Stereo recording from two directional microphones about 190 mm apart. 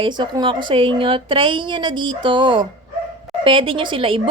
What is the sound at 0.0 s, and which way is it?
A woman's voice, 25° right (ahead or behind).